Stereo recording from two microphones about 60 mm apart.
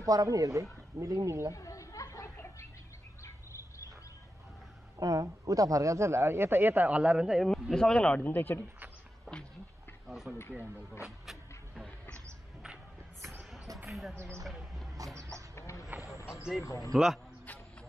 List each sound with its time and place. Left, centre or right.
0.0 s speech: right
1.5 s chatter: left
4.9 s speech: right; by 7.3 s centre
7.7 s speech: centre
8.2 s speech: left
10.0 s speech: centre
13.8 s speech: centre
15.1 s bird: right
15.5 s a sound: left
16.6 s speech: left
16.9 s speech: centre